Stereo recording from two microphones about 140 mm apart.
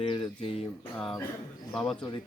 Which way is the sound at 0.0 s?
40° left (ahead or behind).